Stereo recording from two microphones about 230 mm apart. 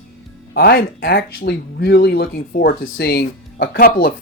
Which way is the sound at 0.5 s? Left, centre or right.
Left.